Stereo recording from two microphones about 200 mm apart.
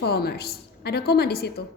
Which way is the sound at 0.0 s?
50° left (ahead or behind).